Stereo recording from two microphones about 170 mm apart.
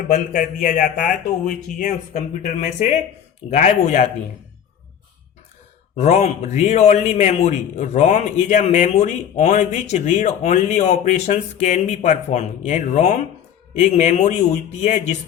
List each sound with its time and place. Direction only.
0.1 s a man's voice: 50° left (ahead or behind)
6.0 s a man's voice: 40° left (ahead or behind)